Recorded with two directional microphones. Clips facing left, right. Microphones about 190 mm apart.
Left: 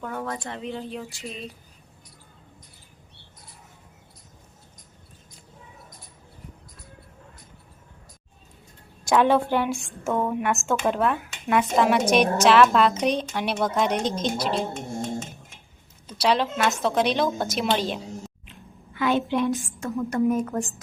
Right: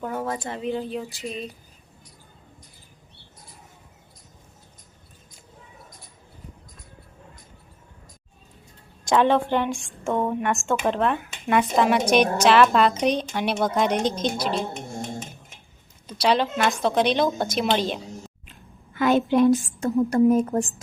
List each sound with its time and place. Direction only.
0.0 s a woman's voice: 10° right (ahead or behind)
9.0 s a woman's voice: 10° left (ahead or behind)
16.0 s a woman's voice: 5° left (ahead or behind)
18.9 s a woman's voice: 45° right (ahead or behind)